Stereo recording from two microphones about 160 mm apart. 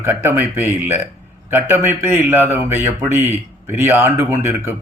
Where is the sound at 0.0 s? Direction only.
15° right (ahead or behind).